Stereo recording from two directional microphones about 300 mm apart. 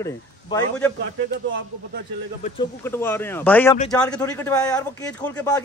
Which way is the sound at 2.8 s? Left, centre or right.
Centre.